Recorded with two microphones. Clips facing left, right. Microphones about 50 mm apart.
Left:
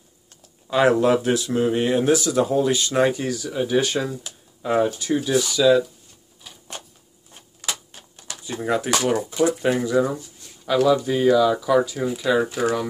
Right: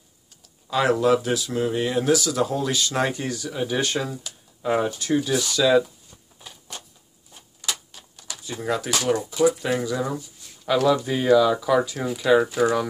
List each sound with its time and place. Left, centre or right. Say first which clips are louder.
0.7 s speech: left 2 dB; left
2.9 s speech: left 4 dB; centre
4.9 s speech: left 2 dB; centre
7.6 s a sound: left 1 dB; left
9.6 s speech: left 5 dB; left
10.6 s speech: left 2 dB; centre